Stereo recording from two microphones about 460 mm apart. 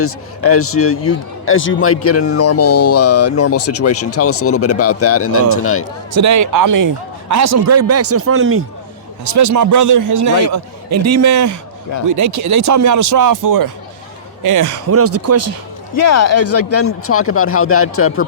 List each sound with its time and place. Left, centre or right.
0.0 s speech: left
6.1 s a man's voice: right
9.2 s a man's voice: right
16.0 s speech: left